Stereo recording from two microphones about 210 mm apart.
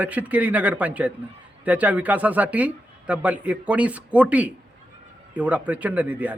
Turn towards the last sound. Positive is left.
turn(degrees=-5)  # may be behind; listen again after turning